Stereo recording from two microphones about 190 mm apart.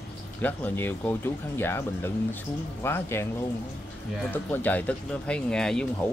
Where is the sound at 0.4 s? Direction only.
10° left (ahead or behind).